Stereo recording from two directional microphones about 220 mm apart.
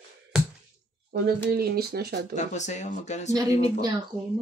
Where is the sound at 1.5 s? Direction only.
45° right (ahead or behind).